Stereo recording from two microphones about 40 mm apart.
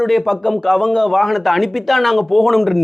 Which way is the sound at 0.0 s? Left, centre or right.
Centre.